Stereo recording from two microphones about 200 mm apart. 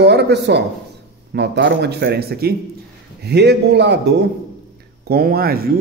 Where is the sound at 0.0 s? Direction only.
60° right (ahead or behind).